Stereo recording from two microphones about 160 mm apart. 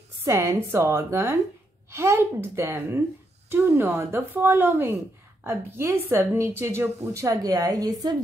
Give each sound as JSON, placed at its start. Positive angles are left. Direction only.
{"t": 0.2, "sound": "a woman's voice", "side_deg": -15}